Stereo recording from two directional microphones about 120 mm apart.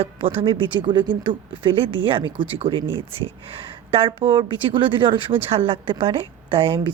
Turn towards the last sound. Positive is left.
turn(degrees=-50)  # may be behind; listen again after turning